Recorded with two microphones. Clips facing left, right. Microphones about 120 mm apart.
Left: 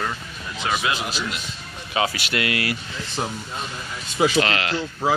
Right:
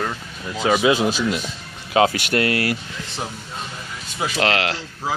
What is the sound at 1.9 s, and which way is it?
Speech, 55° right (ahead or behind).